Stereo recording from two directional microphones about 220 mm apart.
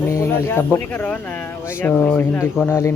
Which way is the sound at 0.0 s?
10° left (ahead or behind).